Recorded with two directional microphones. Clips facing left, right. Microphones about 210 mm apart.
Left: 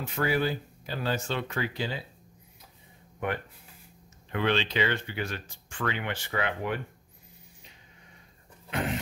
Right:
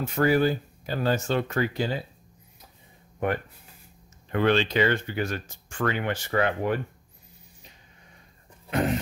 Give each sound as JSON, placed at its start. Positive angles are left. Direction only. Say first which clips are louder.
{"t": 0.0, "sound": "speech", "louder": "right 6 dB", "side_deg": -45}
{"t": 4.3, "sound": "speech", "louder": "right 5 dB", "side_deg": -45}
{"t": 8.6, "sound": "a sound", "louder": "right 6 dB", "side_deg": -40}